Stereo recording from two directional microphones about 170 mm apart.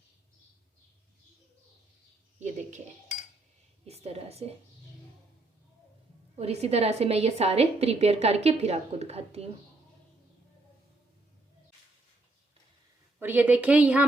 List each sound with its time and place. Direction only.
2.4 s a sound: 45° right (ahead or behind)
3.8 s a woman's voice: 40° right (ahead or behind)
6.3 s a woman's voice: 40° right (ahead or behind)
13.1 s a woman's voice: 10° right (ahead or behind)